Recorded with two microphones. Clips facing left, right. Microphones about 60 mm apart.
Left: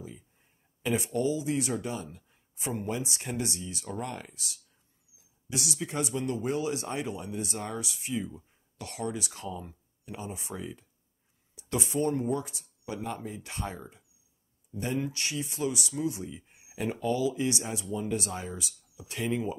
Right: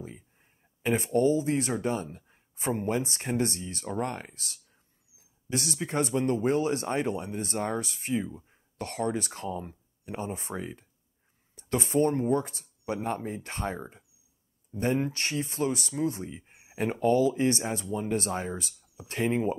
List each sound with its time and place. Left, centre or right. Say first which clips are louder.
0.0 s speech: right 2 dB; right
8.3 s speech: right 3 dB; right
8.7 s speech: right 5 dB; right